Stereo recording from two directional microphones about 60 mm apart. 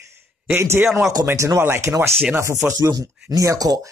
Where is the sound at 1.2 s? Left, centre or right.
Right.